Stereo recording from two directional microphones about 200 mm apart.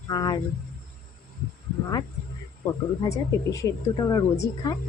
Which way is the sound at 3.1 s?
15° left (ahead or behind).